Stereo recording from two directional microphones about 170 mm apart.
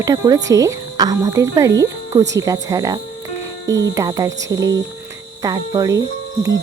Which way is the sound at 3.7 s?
90° right.